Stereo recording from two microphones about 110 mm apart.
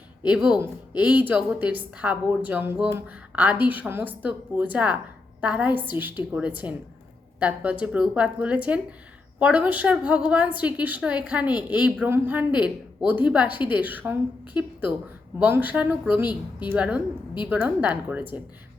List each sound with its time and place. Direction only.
0.3 s a woman's voice: 10° right (ahead or behind)
15.4 s a woman's voice: 15° right (ahead or behind)